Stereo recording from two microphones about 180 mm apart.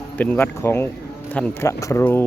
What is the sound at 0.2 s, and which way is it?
Speech, 10° left (ahead or behind).